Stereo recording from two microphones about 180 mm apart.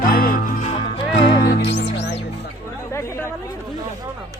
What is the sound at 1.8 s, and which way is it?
Music, 75° left (ahead or behind).